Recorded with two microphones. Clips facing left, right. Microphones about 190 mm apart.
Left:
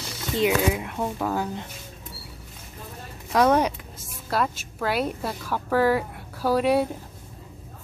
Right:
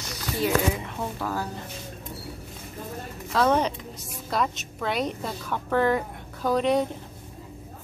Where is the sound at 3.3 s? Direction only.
10° left (ahead or behind).